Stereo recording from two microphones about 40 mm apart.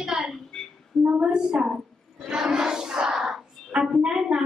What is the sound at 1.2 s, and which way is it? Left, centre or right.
Speech, right.